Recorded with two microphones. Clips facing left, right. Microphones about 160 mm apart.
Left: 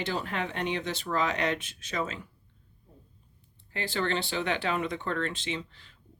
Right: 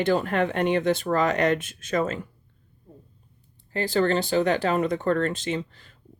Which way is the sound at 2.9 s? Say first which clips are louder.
Right 8 dB; 45° right (ahead or behind).